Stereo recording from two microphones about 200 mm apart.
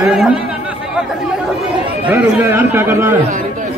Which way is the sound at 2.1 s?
10° right (ahead or behind).